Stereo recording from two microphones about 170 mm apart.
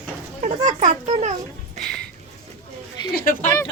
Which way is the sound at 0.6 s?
45° right (ahead or behind).